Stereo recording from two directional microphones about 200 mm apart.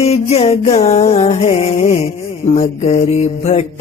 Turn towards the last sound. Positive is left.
turn(degrees=35)  # may be behind; listen again after turning